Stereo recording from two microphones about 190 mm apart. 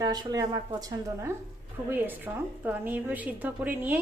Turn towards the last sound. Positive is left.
turn(degrees=-10)  # may be behind; listen again after turning